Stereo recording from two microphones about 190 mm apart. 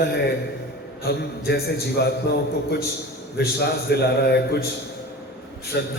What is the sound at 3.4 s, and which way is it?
A man's voice, 60° left (ahead or behind).